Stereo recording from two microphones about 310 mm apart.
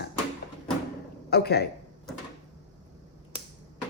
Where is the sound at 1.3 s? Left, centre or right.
Left.